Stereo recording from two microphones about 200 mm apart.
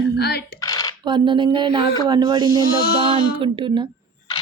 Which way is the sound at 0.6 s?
20° left (ahead or behind).